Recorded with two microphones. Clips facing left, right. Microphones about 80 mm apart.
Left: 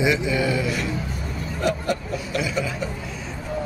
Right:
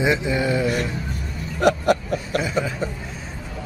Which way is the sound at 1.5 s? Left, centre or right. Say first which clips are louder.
Right 6 dB; right.